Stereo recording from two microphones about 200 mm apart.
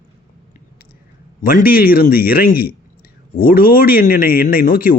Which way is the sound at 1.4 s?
50° left (ahead or behind).